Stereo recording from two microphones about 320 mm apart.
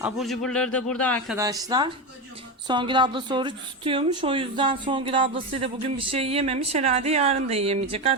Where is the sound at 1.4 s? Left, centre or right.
Centre.